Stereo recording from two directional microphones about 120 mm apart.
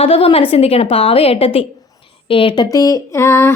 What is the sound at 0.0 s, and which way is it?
A woman's voice, 50° left (ahead or behind).